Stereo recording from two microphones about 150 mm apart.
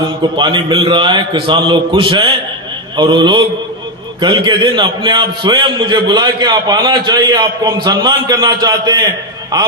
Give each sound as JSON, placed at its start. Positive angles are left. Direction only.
{"t": 0.3, "sound": "a man's voice", "side_deg": -30}